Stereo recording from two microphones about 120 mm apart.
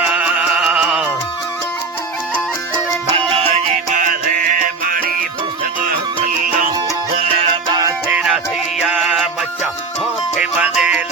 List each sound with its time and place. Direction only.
0.0 s music: 10° right (ahead or behind)
3.2 s music: 50° right (ahead or behind)
3.5 s music: 90° right
7.2 s music: 50° right (ahead or behind)
8.1 s music: 10° right (ahead or behind)
10.4 s music: 10° right (ahead or behind)